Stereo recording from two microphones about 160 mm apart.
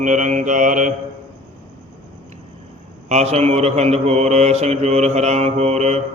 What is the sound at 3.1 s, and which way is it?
Mantra, 45° right (ahead or behind).